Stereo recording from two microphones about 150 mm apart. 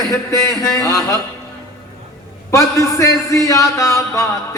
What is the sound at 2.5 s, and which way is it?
A man's voice, 20° left (ahead or behind).